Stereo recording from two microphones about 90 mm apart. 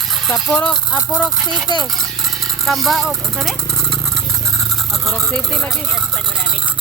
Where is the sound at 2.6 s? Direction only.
Centre (ahead or behind).